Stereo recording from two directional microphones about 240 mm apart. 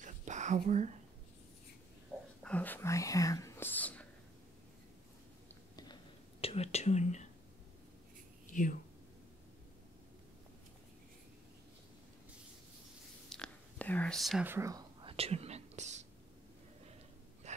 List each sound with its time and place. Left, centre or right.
0.0 s whispering: right
2.4 s speech: centre
6.4 s speech: left
8.5 s speech: left
13.3 s whispering: centre; by 16.1 s right
17.4 s gasp: right